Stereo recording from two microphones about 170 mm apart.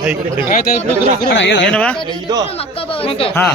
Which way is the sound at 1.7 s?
5° left (ahead or behind).